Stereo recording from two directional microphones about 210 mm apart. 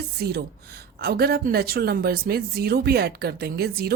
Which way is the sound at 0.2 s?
50° right (ahead or behind).